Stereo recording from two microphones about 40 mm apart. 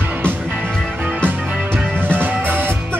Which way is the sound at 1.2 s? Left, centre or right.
Right.